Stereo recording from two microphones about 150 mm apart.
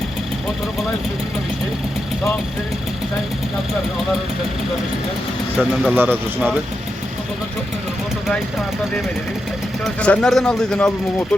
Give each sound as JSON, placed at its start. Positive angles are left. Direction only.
{"t": 5.5, "sound": "speech", "side_deg": 0}
{"t": 5.9, "sound": "speech", "side_deg": -15}
{"t": 9.8, "sound": "speech", "side_deg": 5}